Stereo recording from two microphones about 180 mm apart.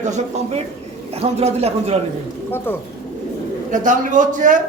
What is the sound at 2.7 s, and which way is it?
Speech, 10° left (ahead or behind).